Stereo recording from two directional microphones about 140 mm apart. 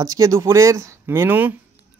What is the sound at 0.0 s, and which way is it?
Speech, 25° right (ahead or behind).